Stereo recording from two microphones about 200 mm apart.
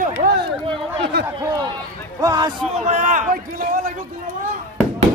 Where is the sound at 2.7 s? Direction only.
35° right (ahead or behind).